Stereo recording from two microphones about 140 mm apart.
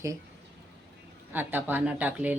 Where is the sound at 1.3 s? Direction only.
15° right (ahead or behind).